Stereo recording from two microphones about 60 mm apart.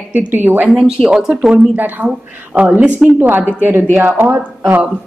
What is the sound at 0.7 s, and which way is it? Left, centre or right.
Speech, centre.